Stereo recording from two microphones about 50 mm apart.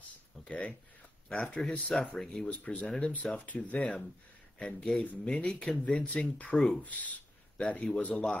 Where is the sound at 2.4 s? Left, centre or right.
Left.